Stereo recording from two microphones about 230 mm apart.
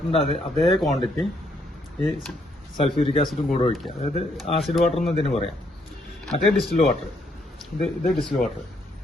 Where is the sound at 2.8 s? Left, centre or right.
Left.